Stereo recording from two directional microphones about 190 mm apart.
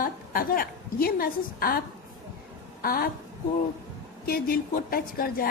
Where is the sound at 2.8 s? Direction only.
50° left (ahead or behind).